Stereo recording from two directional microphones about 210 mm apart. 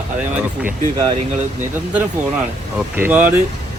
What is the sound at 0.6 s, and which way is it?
Speech, 15° right (ahead or behind).